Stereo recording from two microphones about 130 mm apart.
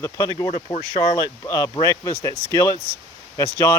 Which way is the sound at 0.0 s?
25° left (ahead or behind).